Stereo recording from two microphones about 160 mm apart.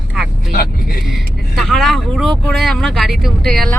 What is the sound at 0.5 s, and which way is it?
Speech, 70° left (ahead or behind).